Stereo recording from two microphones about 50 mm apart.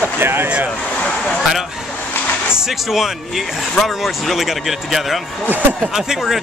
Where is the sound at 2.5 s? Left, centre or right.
Centre.